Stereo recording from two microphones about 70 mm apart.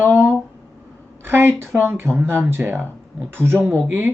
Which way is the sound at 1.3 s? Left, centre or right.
Right.